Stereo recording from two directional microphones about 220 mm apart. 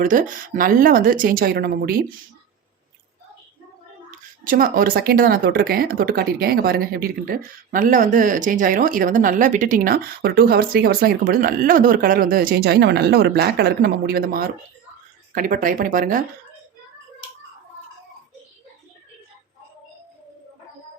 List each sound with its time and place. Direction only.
0.0 s speech: 40° right (ahead or behind)
4.1 s speech: 40° right (ahead or behind)